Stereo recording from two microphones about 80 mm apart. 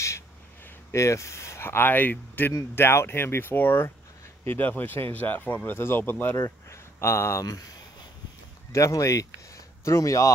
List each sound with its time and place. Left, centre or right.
0.7 s speech: left
6.3 s speech: left
8.7 s speech: left